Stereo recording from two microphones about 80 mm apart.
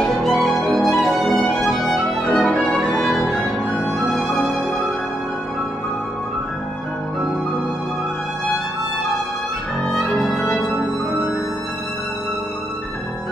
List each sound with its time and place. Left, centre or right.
0.0 s music: centre
9.8 s music: centre